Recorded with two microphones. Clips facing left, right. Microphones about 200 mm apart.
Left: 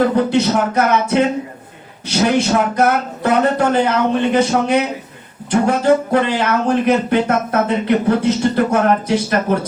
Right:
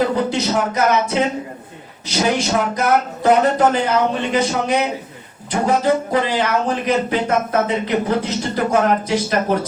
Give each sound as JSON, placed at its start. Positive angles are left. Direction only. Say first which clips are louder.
{"t": 0.0, "sound": "speech", "louder": "left 4 dB", "side_deg": 60}